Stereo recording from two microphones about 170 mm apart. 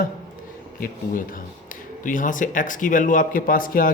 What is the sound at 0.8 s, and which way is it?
Speech, 55° left (ahead or behind).